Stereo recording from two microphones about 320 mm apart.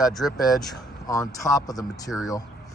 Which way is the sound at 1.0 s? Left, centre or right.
Centre.